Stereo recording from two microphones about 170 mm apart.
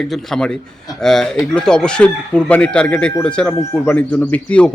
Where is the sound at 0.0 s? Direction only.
5° left (ahead or behind).